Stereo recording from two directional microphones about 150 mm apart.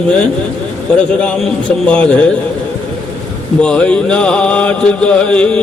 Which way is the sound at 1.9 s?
5° left (ahead or behind).